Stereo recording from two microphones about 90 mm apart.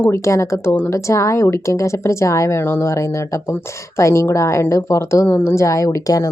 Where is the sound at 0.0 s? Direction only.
30° left (ahead or behind).